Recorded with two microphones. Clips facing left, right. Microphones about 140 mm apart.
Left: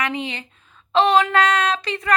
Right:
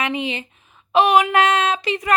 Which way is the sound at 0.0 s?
20° right (ahead or behind).